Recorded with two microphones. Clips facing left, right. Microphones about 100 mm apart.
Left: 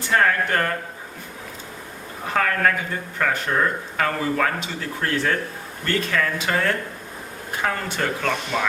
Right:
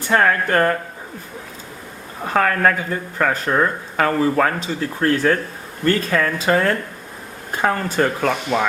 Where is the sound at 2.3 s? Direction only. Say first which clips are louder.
Right 4 dB; 40° right (ahead or behind).